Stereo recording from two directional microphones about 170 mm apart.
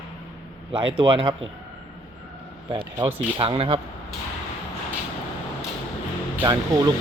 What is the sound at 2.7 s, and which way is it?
Speech, 30° right (ahead or behind).